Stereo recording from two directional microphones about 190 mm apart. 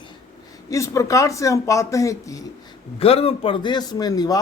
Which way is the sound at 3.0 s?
30° left (ahead or behind).